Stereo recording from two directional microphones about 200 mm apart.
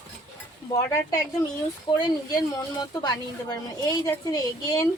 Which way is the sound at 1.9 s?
20° left (ahead or behind).